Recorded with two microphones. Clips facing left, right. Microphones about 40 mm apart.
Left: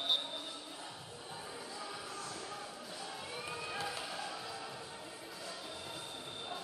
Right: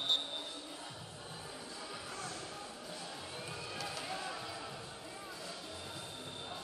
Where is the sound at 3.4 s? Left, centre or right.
Centre.